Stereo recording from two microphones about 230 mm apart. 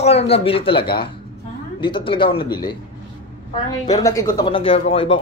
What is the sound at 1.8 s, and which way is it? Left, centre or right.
Speech, left.